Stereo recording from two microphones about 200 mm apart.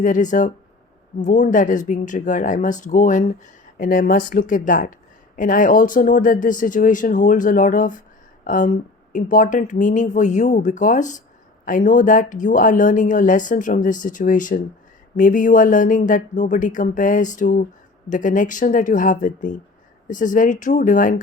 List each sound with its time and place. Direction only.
0.0 s speech: 40° left (ahead or behind)